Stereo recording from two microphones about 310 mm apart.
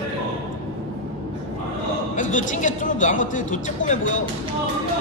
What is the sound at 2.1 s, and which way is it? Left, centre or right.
Speech, left.